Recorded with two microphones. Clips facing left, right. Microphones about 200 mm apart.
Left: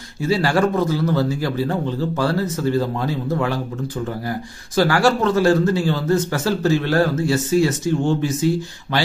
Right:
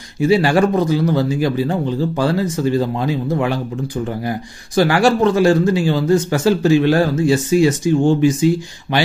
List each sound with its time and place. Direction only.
0.2 s speech: 15° right (ahead or behind)